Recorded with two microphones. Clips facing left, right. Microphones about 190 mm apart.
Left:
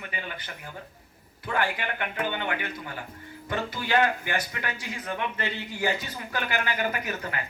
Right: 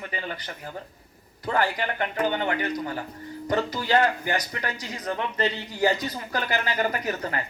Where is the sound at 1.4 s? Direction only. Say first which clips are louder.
Right 3 dB; 40° right (ahead or behind).